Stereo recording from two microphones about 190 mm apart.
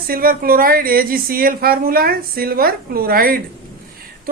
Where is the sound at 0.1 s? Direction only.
50° right (ahead or behind).